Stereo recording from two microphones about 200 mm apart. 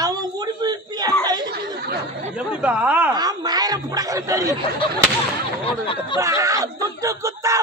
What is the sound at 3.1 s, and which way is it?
Speech, 20° right (ahead or behind).